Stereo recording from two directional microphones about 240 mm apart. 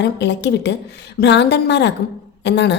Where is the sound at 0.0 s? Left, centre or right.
Left.